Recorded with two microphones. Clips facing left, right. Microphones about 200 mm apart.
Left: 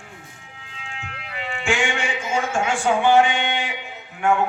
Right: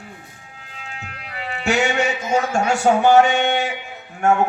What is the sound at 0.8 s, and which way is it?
Speech, 40° right (ahead or behind).